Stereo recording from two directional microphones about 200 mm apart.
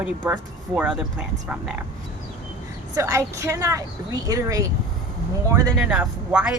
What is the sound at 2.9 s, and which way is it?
A woman's voice, 15° right (ahead or behind).